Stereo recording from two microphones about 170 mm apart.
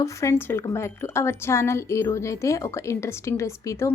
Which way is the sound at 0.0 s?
20° left (ahead or behind).